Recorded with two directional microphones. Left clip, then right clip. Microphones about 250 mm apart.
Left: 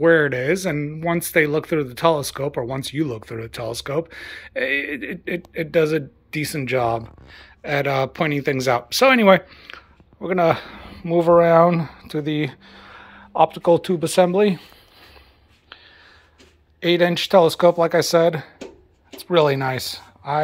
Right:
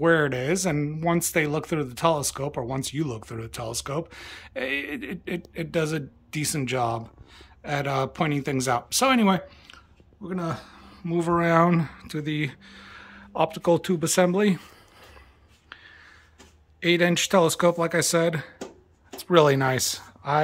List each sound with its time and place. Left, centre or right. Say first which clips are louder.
0.0 s speech: left 6 dB; centre
16.8 s speech: left 4 dB; centre